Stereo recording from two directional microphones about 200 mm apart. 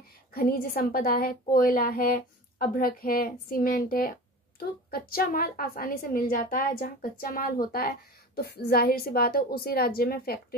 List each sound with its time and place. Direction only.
0.3 s a woman's voice: 45° left (ahead or behind)